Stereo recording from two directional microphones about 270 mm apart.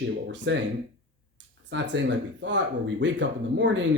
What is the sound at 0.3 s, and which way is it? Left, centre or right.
Speech, right.